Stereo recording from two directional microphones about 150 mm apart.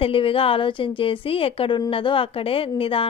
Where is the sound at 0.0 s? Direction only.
35° left (ahead or behind).